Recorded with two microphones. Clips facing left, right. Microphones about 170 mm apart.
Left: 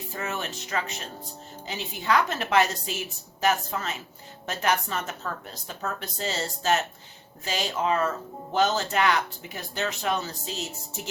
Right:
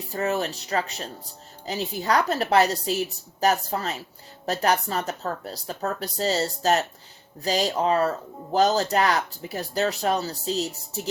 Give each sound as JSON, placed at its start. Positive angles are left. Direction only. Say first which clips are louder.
{"t": 0.1, "sound": "speech", "louder": "right 8 dB", "side_deg": -35}